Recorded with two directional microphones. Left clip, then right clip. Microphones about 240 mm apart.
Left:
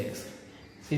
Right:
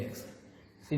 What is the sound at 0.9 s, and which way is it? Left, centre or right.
Speech, right.